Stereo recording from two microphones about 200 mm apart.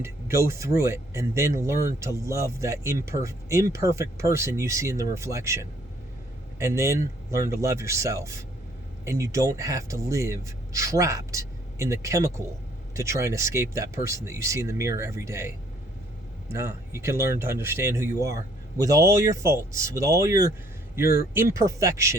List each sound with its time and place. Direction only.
0.0 s speech: 15° right (ahead or behind)